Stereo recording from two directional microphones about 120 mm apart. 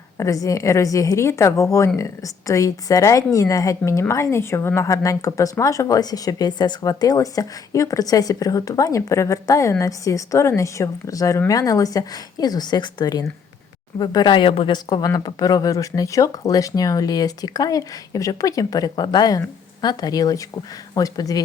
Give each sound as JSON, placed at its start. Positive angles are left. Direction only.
{"t": 0.2, "sound": "speech", "side_deg": 30}